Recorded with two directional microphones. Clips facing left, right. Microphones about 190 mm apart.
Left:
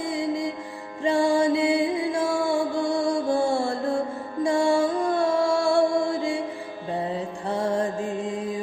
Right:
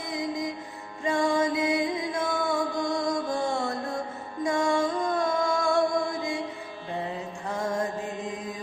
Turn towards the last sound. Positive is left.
turn(degrees=30)  # may be behind; listen again after turning